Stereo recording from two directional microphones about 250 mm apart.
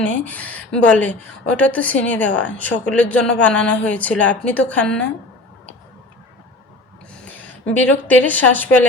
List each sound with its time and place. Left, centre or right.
0.0 s speech: centre
7.3 s a woman's voice: centre